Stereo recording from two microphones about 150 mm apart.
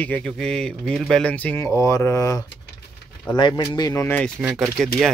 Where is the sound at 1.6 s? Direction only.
20° left (ahead or behind).